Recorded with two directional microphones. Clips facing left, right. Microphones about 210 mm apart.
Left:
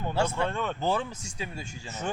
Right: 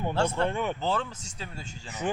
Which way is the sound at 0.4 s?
15° right (ahead or behind).